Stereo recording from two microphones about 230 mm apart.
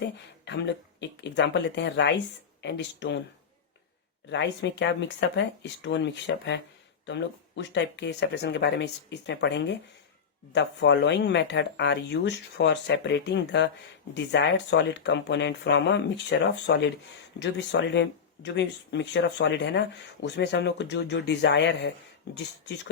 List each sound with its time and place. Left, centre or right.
0.4 s speech: left
4.3 s speech: left